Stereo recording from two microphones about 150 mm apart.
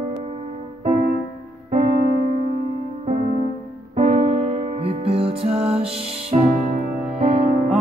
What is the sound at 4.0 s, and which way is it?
Music, 55° right (ahead or behind).